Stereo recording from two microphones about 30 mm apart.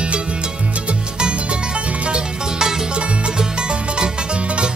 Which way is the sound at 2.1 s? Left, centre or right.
Right.